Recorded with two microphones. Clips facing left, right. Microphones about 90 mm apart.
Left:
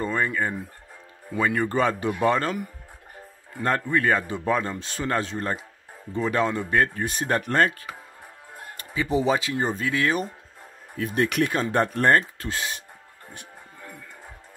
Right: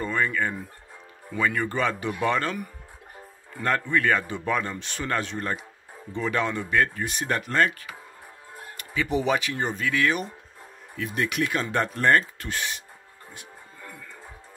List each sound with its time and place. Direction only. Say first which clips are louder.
0.0 s speech: left 1 dB; 30° left (ahead or behind)
3.5 s speech: left 1 dB; 30° left (ahead or behind)
8.7 s speech: left 2 dB; 30° left (ahead or behind)
11.0 s speech: left 4 dB; 45° left (ahead or behind)